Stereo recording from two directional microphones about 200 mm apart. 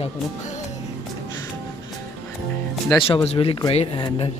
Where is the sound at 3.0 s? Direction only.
30° left (ahead or behind).